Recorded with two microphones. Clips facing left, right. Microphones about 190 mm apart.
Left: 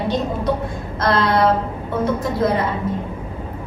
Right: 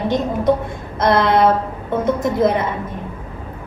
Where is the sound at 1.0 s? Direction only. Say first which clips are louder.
Right 3 dB; 20° right (ahead or behind).